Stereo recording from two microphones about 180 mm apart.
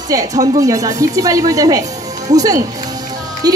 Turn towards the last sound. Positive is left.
turn(degrees=-20)  # may be behind; listen again after turning